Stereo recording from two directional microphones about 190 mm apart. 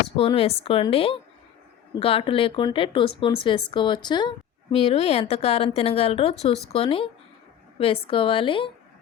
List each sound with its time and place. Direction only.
0.2 s a woman's voice: 30° left (ahead or behind)